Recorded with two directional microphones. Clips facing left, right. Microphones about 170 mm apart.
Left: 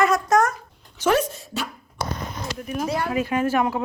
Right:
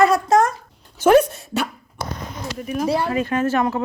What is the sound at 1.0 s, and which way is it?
Speech, 55° right (ahead or behind).